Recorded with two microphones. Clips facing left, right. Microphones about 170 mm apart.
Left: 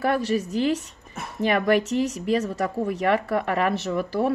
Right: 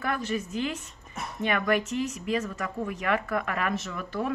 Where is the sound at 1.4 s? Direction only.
35° left (ahead or behind).